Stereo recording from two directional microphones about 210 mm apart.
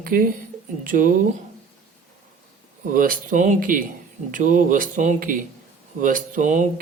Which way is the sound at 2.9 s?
40° right (ahead or behind).